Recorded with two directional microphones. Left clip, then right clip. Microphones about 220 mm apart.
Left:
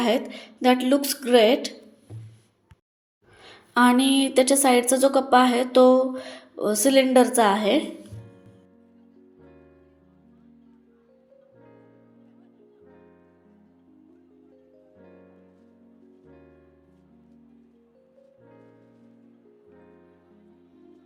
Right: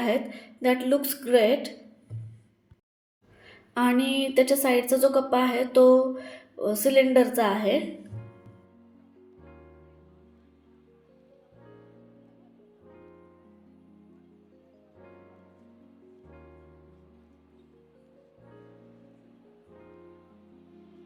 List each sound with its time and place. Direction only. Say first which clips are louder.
0.0 s a woman's voice: left 3 dB; 30° left (ahead or behind)
3.4 s a woman's voice: left 7 dB; 25° left (ahead or behind)